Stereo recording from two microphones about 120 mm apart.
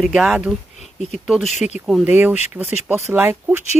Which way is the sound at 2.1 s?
15° right (ahead or behind).